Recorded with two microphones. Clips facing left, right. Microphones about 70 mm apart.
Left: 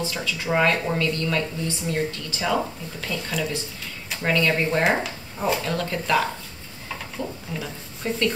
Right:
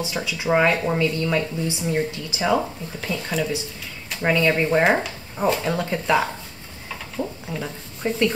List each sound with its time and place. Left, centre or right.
0.0 s speech: centre
0.7 s speech: centre
4.2 s speech: centre